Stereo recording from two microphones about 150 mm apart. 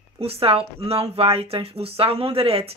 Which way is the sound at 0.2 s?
40° right (ahead or behind).